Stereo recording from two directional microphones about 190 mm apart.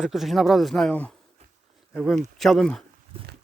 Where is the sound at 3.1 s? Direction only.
30° right (ahead or behind).